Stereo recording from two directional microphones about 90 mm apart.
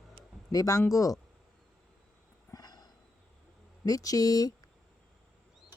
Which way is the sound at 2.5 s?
45° left (ahead or behind).